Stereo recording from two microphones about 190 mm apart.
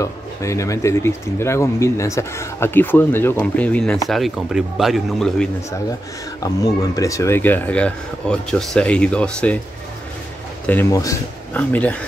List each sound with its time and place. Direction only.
0.0 s a man's voice: 15° left (ahead or behind); by 5.5 s centre (ahead or behind)
6.4 s speech: 20° left (ahead or behind)
10.7 s speech: 15° left (ahead or behind)